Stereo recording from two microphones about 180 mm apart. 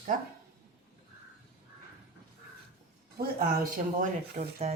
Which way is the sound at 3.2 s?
55° right (ahead or behind).